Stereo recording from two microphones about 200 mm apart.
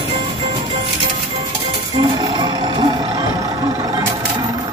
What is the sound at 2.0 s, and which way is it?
Music, 25° right (ahead or behind).